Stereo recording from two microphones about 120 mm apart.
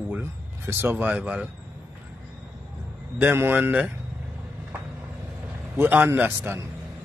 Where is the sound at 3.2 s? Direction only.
15° right (ahead or behind).